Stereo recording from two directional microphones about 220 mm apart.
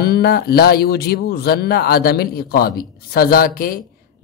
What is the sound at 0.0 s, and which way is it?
A man's voice, 45° left (ahead or behind).